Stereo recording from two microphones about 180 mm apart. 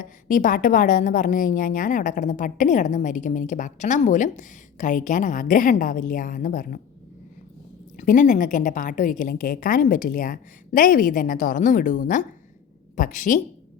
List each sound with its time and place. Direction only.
0.0 s a woman's voice: 50° left (ahead or behind)
7.9 s a woman's voice: 45° left (ahead or behind)